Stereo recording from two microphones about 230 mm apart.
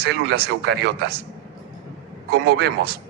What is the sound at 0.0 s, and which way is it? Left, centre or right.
A man's voice, right.